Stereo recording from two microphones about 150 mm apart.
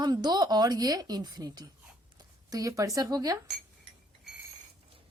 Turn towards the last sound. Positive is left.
turn(degrees=-25)  # may be behind; listen again after turning